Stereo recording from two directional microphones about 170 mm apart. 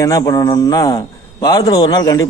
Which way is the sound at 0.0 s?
20° left (ahead or behind).